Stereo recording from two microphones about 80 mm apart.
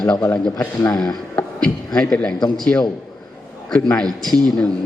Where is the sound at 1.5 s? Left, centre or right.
Centre.